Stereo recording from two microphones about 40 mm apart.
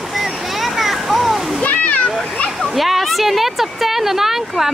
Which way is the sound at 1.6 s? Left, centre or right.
Left.